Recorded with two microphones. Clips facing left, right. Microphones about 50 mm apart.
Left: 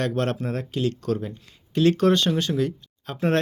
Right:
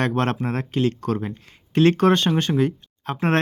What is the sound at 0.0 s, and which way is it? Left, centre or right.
Speech, right.